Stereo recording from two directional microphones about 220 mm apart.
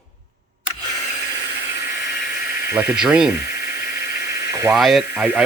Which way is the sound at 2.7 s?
5° right (ahead or behind).